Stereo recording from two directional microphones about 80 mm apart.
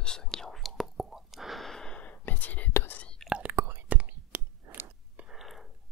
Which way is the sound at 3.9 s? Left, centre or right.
Centre.